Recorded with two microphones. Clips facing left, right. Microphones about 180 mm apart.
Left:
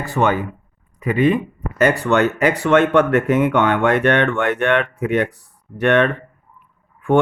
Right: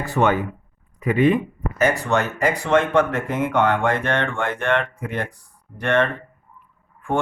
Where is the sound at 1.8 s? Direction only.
60° left (ahead or behind).